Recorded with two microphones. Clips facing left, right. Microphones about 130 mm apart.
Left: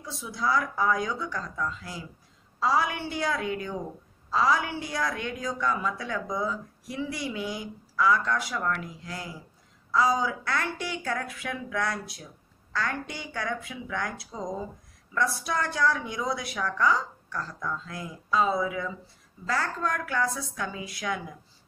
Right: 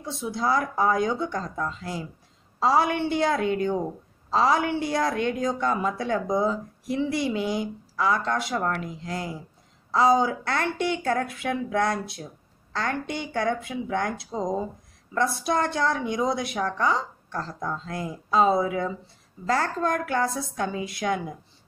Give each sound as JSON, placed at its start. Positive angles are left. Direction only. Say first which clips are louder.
{"t": 0.0, "sound": "a woman's voice", "louder": "right 4 dB", "side_deg": -25}